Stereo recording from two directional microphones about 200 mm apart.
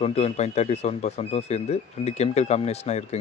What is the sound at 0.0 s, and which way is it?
Speech, 30° left (ahead or behind).